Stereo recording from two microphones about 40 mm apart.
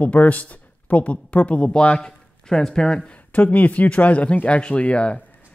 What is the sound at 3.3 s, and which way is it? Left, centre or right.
Speech, left.